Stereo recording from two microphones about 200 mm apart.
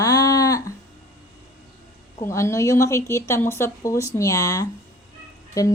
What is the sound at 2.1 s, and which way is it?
A woman's voice, 15° left (ahead or behind).